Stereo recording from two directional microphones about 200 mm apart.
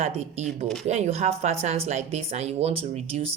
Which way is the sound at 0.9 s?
35° right (ahead or behind).